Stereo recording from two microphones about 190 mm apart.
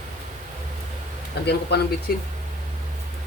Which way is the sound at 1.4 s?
55° left (ahead or behind).